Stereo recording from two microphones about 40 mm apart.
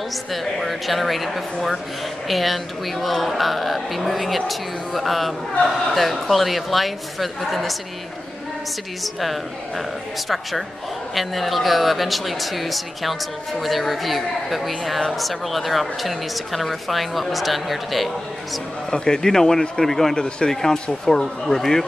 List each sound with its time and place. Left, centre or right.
0.3 s speech: centre
9.0 s speech: centre
18.9 s speech: centre